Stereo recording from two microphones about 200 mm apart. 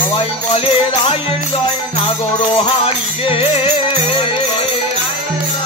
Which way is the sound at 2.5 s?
25° left (ahead or behind).